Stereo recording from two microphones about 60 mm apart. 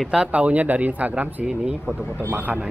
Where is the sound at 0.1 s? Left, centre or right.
Centre.